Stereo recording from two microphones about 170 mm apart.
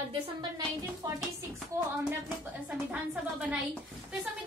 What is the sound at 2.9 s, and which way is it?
Speech, 5° right (ahead or behind).